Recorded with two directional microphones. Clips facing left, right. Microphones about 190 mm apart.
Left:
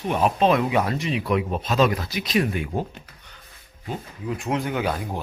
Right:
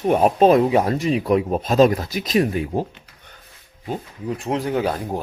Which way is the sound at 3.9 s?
35° right (ahead or behind).